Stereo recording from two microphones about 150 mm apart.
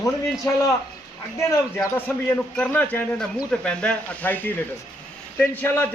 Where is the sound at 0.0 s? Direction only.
20° left (ahead or behind).